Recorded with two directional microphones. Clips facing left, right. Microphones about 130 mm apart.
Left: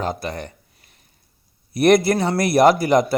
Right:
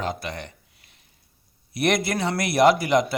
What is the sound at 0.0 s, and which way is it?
Speech, 40° left (ahead or behind).